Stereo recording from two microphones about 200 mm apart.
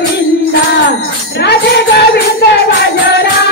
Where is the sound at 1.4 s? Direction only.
55° left (ahead or behind).